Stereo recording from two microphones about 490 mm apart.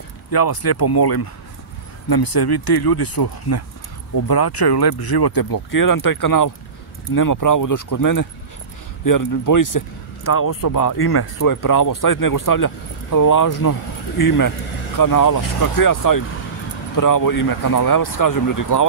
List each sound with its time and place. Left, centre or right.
0.3 s speech: left